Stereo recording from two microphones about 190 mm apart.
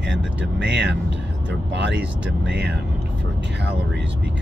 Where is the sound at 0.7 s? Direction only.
65° right (ahead or behind).